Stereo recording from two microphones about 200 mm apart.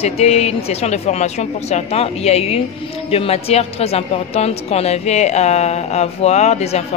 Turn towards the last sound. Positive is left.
turn(degrees=30)  # may be behind; listen again after turning